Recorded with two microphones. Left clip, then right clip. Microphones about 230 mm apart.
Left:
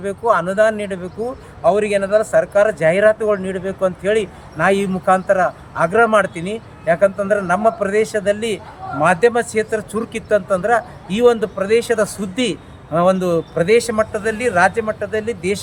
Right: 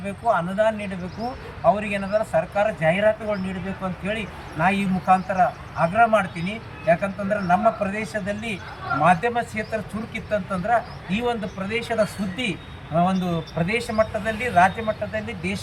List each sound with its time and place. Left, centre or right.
0.0 s speech: centre